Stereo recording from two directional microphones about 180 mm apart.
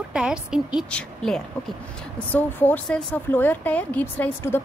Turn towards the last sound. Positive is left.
turn(degrees=10)  # may be behind; listen again after turning